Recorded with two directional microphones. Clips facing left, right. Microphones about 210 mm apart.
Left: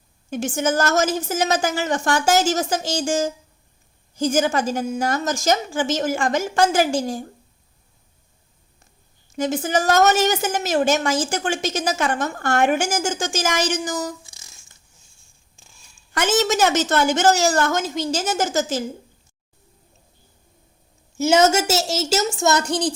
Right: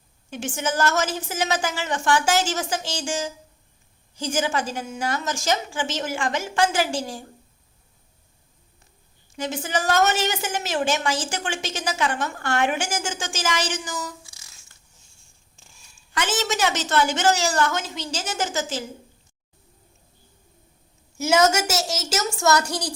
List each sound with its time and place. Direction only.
0.3 s a woman's voice: 40° left (ahead or behind)
9.3 s a woman's voice: 45° left (ahead or behind)
16.1 s a woman's voice: 45° left (ahead or behind)
21.2 s a woman's voice: 25° left (ahead or behind)